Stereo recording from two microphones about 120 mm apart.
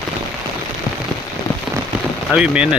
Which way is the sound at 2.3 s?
10° right (ahead or behind).